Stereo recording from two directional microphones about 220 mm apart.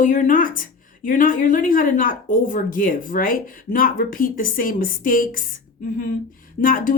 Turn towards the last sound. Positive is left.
turn(degrees=40)  # may be behind; listen again after turning